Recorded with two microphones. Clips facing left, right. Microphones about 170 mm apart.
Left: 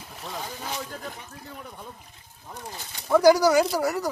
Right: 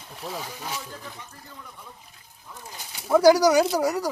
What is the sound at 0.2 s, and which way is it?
Speech, 5° right (ahead or behind).